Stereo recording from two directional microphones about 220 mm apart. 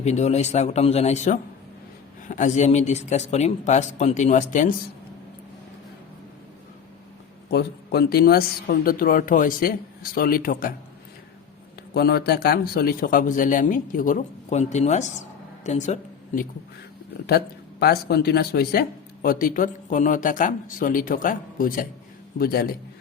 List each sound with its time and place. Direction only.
0.0 s speech: 30° left (ahead or behind)
7.5 s speech: 45° left (ahead or behind)
11.9 s a woman's voice: 45° left (ahead or behind)
17.2 s a man's voice: 45° left (ahead or behind)